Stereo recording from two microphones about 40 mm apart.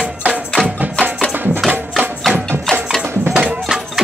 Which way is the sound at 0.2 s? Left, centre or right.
Right.